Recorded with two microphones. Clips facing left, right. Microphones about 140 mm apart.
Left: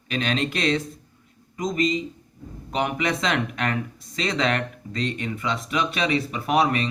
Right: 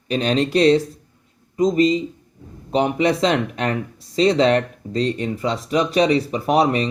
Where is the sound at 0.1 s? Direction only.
35° right (ahead or behind).